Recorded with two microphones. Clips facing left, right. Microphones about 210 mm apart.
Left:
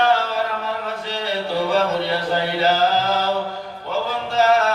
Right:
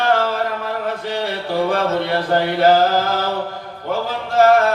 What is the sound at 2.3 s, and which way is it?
Speech, 55° right (ahead or behind).